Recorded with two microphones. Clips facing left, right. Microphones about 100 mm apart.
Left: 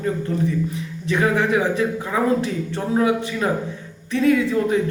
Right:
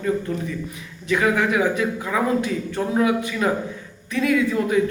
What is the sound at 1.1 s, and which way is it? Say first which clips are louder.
A man's voice: left 1 dB; 30° left (ahead or behind).